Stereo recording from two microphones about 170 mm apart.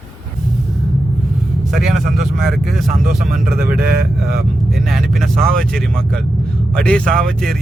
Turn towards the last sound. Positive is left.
turn(degrees=5)  # may be behind; listen again after turning